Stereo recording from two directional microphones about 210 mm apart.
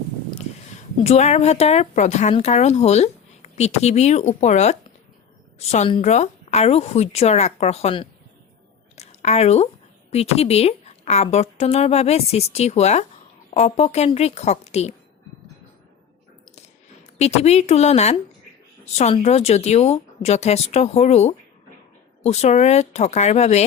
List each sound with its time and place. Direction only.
1.0 s speech: 30° left (ahead or behind)
17.2 s speech: 30° left (ahead or behind)